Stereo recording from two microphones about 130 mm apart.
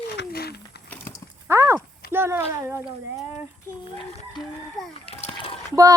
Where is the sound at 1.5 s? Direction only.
20° right (ahead or behind).